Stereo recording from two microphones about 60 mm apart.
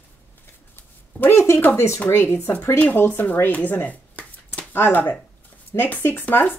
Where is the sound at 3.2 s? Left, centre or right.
Left.